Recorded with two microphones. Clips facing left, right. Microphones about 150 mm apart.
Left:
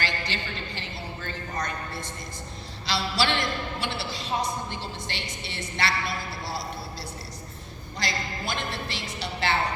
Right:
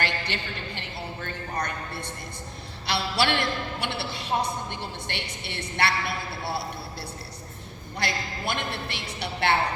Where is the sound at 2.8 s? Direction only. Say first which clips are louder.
Right 1 dB; 60° right (ahead or behind).